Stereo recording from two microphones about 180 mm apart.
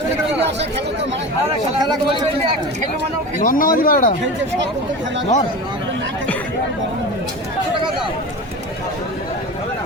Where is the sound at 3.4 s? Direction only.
50° left (ahead or behind).